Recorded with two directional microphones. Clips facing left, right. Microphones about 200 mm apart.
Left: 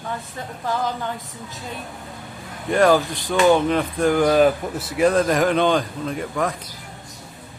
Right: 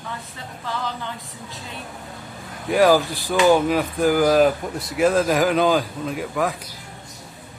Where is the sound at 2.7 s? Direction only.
5° right (ahead or behind).